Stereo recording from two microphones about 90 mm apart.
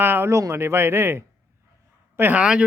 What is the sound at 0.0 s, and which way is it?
Speech, 25° right (ahead or behind).